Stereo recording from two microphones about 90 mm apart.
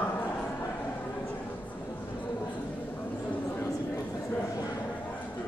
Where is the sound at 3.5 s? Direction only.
30° left (ahead or behind).